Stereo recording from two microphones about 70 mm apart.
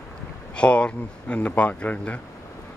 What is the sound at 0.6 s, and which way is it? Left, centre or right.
Speech, centre.